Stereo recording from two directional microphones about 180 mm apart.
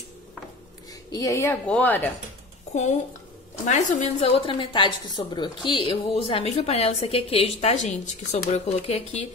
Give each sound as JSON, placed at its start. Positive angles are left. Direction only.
{"t": 1.1, "sound": "speech", "side_deg": 20}
{"t": 2.7, "sound": "a woman's voice", "side_deg": 40}